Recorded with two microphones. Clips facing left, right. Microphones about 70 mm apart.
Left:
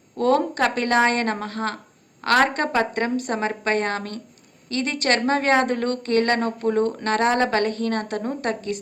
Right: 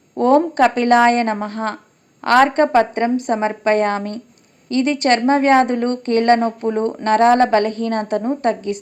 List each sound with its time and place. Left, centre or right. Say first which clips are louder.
0.2 s speech: right 6 dB; right